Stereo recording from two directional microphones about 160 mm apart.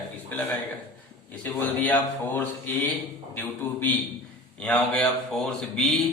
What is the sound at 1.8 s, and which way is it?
A man's voice, 10° left (ahead or behind).